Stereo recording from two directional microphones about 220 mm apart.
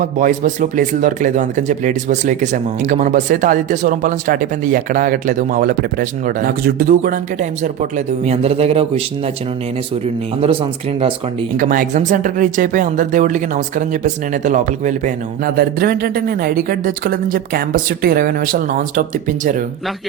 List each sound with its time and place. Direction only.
0.0 s speech: 35° right (ahead or behind)
10.4 s speech: 25° right (ahead or behind)
11.5 s speech: 40° right (ahead or behind)